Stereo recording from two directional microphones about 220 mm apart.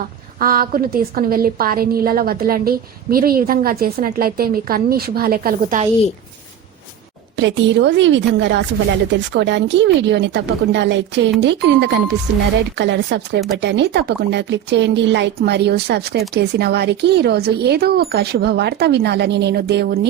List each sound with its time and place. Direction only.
0.3 s a woman's voice: 40° right (ahead or behind)
7.3 s a woman's voice: 55° right (ahead or behind)